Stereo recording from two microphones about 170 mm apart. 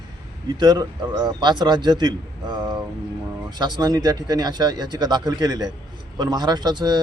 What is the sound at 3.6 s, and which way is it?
Speech, 25° right (ahead or behind).